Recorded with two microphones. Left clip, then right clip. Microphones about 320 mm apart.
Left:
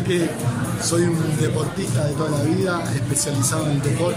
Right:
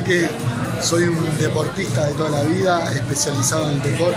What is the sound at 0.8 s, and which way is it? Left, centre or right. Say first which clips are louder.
Speech: right 2 dB; centre.